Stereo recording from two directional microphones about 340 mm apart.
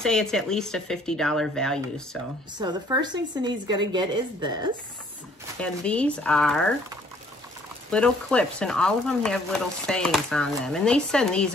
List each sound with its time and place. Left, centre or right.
0.0 s speech: centre
2.6 s a woman's voice: centre
5.6 s speech: centre
7.9 s speech: centre